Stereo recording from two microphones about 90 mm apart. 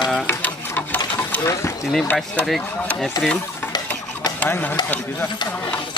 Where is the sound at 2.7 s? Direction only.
15° left (ahead or behind).